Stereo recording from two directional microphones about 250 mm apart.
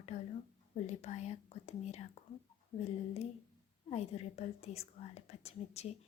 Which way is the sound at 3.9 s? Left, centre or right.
Left.